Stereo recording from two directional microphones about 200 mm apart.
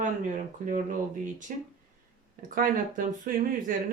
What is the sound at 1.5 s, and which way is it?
Speech, 40° right (ahead or behind).